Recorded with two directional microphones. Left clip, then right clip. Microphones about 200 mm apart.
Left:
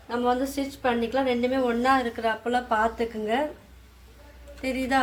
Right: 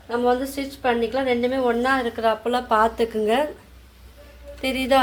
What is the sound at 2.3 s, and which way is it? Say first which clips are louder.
Speech: right 6 dB; 30° right (ahead or behind).